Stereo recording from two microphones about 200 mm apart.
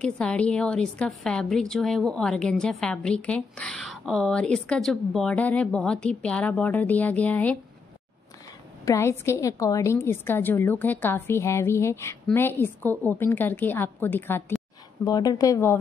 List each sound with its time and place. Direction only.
0.0 s a woman's voice: 5° left (ahead or behind)
8.8 s a woman's voice: 15° left (ahead or behind)